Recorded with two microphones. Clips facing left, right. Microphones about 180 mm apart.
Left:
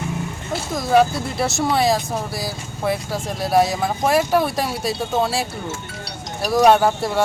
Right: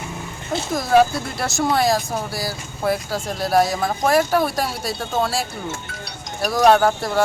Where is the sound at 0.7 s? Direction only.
Centre (ahead or behind).